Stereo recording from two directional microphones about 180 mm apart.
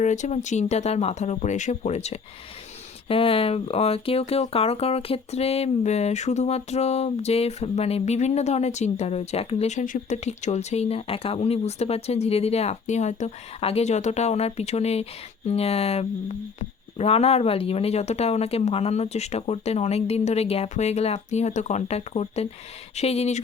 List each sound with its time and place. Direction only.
0.0 s speech: 40° left (ahead or behind)